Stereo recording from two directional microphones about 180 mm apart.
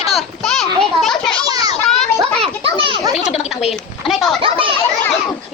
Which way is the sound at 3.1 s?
35° left (ahead or behind).